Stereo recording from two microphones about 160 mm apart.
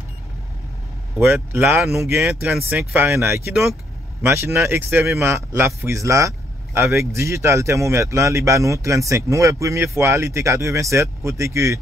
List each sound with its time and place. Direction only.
1.1 s speech: 10° right (ahead or behind)